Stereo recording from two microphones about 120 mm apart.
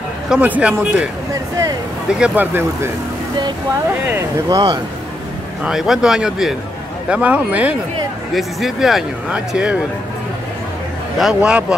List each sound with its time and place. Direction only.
0.3 s speech: 10° right (ahead or behind)
2.1 s speech: 10° right (ahead or behind)
4.5 s speech: 30° right (ahead or behind)
5.6 s speech: 5° right (ahead or behind)
8.4 s speech: centre (ahead or behind)
11.1 s speech: 5° right (ahead or behind)